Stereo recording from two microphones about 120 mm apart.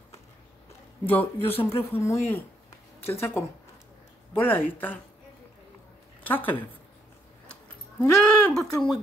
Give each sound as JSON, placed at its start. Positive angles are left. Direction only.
{"t": 1.0, "sound": "speech", "side_deg": 15}
{"t": 6.2, "sound": "speech", "side_deg": 15}
{"t": 8.0, "sound": "speech", "side_deg": 5}